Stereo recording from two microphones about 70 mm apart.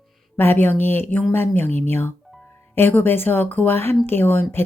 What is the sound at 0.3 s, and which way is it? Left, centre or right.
Speech, left.